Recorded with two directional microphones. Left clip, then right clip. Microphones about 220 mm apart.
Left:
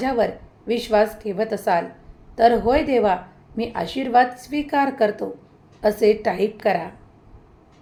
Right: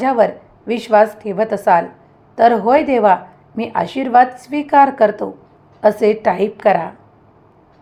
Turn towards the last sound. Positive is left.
turn(degrees=-20)  # may be behind; listen again after turning